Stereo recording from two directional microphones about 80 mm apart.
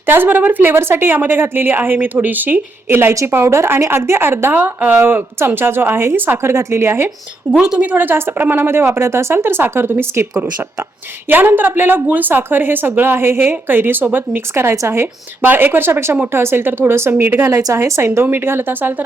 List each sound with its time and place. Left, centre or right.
0.0 s a woman's voice: right
7.5 s a woman's voice: centre; by 10.2 s right
11.3 s a woman's voice: right